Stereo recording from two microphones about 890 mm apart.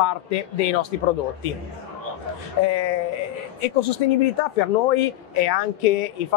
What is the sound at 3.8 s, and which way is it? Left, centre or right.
Speech, left.